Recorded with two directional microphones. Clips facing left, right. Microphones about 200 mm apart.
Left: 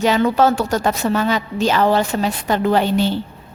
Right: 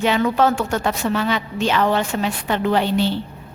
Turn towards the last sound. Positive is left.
turn(degrees=45)  # may be behind; listen again after turning